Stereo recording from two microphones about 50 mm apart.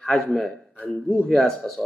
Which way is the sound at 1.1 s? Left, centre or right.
Centre.